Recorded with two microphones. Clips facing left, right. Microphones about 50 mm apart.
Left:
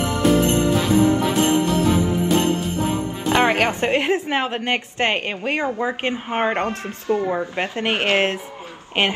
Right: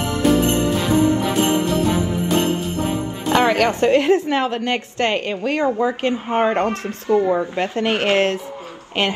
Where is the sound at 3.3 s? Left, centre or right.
Left.